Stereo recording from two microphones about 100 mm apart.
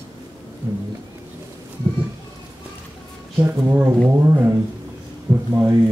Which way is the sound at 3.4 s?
20° right (ahead or behind).